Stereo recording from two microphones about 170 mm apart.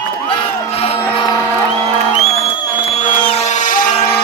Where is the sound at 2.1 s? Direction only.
40° left (ahead or behind).